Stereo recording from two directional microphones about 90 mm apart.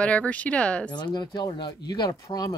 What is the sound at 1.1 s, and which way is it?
Speech, 55° left (ahead or behind).